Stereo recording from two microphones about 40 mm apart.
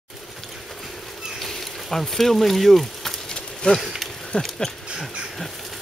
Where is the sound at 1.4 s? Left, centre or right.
Centre.